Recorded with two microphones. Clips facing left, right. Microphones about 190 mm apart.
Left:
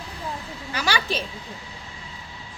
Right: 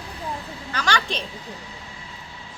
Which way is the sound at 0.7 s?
10° left (ahead or behind).